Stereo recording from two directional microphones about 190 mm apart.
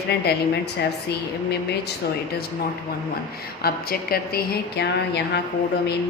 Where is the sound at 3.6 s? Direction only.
55° left (ahead or behind).